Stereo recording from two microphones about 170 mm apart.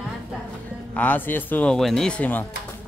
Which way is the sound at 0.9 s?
10° left (ahead or behind).